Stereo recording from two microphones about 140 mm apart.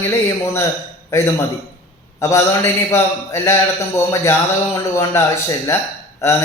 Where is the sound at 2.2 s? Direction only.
20° left (ahead or behind).